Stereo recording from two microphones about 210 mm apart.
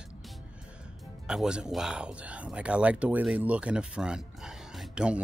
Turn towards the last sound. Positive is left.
turn(degrees=-5)  # may be behind; listen again after turning